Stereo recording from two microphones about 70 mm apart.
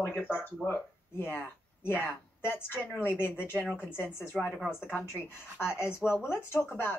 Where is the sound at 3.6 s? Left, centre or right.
Centre.